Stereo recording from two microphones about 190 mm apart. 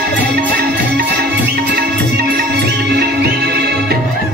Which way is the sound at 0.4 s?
55° right (ahead or behind).